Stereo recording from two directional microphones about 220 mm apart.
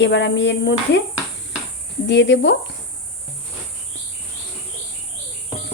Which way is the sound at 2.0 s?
55° left (ahead or behind).